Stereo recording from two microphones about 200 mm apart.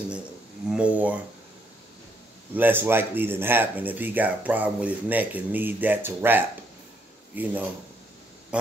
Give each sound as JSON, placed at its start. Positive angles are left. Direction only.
{"t": 0.7, "sound": "speech", "side_deg": -5}
{"t": 2.5, "sound": "speech", "side_deg": -10}